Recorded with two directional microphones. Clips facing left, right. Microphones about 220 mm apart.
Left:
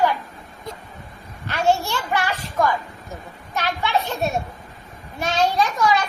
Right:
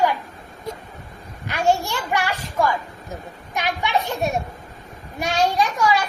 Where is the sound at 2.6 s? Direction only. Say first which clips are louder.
Even; 10° right (ahead or behind).